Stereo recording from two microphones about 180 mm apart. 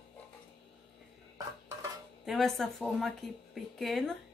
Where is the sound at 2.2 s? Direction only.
Centre (ahead or behind).